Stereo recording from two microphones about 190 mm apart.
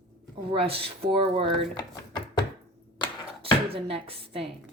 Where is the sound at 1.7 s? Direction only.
20° left (ahead or behind).